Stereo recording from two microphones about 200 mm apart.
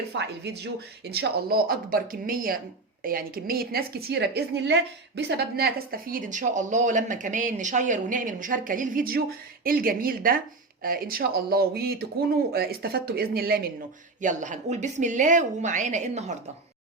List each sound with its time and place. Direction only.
0.1 s a woman's voice: 55° right (ahead or behind)
14.2 s a woman's voice: 40° right (ahead or behind)